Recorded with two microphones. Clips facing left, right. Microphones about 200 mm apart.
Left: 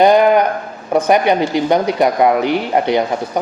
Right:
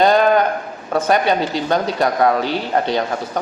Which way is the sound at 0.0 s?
15° left (ahead or behind).